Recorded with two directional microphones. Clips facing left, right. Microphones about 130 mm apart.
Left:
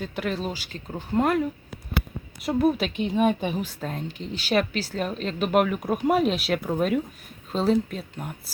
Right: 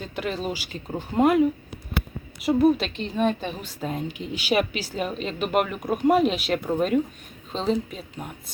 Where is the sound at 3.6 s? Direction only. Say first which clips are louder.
Right 2 dB; 5° right (ahead or behind).